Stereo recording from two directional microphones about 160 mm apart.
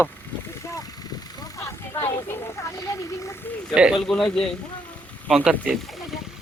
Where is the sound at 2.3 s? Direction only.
15° left (ahead or behind).